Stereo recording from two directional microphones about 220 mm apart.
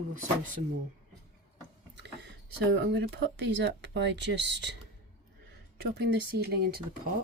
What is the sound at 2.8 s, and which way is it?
Speech, 50° right (ahead or behind).